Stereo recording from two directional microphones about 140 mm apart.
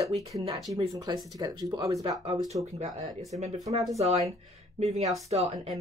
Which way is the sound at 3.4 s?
50° right (ahead or behind).